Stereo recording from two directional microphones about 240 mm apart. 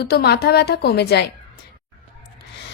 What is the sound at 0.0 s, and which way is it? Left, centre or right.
A woman's voice, left.